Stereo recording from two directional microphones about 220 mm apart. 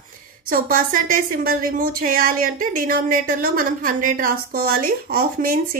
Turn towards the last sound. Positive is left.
turn(degrees=-40)  # may be behind; listen again after turning